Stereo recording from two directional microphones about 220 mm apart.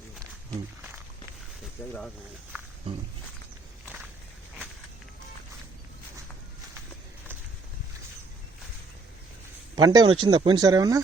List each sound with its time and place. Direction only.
9.7 s speech: 20° right (ahead or behind)